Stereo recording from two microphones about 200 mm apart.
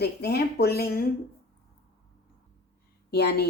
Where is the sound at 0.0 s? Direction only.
55° left (ahead or behind).